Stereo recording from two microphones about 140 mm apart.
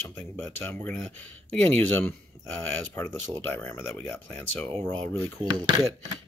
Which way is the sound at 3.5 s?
15° left (ahead or behind).